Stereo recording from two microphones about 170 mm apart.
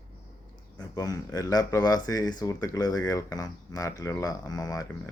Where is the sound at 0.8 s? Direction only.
20° left (ahead or behind).